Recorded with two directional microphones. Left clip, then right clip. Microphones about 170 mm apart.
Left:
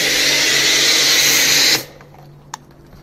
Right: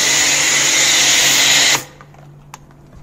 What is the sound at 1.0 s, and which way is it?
Vacuum cleaner, 65° right (ahead or behind).